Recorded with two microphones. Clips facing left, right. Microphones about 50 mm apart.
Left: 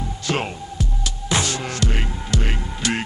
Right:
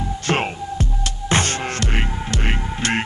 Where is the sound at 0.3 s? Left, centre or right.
Right.